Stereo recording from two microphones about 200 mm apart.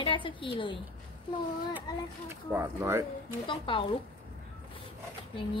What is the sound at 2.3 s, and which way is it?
Speech, 15° right (ahead or behind).